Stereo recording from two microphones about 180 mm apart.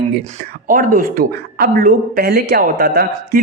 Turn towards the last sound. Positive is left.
turn(degrees=-60)  # may be behind; listen again after turning